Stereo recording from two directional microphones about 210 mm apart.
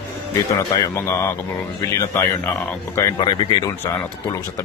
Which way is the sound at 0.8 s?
15° left (ahead or behind).